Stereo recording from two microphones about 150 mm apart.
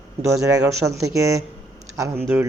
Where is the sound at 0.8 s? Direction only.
20° right (ahead or behind).